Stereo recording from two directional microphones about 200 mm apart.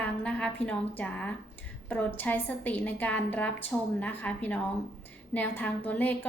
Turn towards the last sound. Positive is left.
turn(degrees=10)  # may be behind; listen again after turning